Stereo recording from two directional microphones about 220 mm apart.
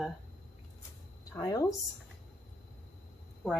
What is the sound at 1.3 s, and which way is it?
Speech, 15° left (ahead or behind).